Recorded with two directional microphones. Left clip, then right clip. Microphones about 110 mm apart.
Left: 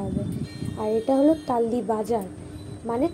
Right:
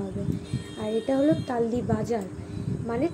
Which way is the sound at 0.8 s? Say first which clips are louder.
Left 4 dB; 50° left (ahead or behind).